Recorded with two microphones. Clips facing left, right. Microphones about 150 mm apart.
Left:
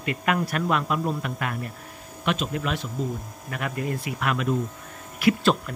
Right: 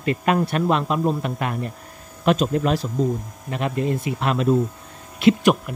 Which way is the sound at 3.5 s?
25° right (ahead or behind).